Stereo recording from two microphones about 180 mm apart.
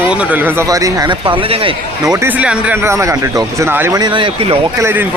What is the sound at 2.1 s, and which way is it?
Speech, 10° right (ahead or behind).